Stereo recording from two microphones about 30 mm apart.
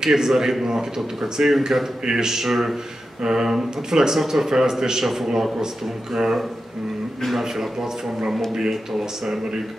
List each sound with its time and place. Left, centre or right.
0.0 s a man's voice: centre
2.4 s a man's voice: centre
3.2 s a man's voice: right
5.0 s a man's voice: centre
5.3 s a man's voice: centre
7.2 s a man's voice: centre